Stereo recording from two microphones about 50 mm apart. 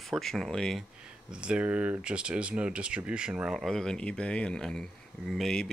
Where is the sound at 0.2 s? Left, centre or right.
Centre.